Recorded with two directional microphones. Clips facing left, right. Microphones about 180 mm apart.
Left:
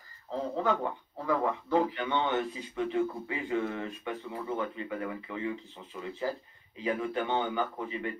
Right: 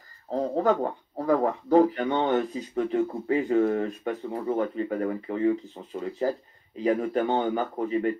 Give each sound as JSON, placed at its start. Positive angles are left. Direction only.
{"t": 0.3, "sound": "a man's voice", "side_deg": -40}